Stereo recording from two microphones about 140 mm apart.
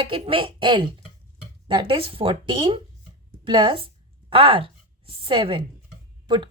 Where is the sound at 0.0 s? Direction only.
40° right (ahead or behind).